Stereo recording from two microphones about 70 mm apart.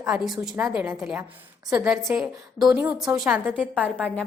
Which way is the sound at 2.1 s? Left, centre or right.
Centre.